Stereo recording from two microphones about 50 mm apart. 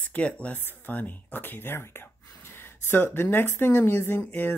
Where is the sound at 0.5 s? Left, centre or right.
Left.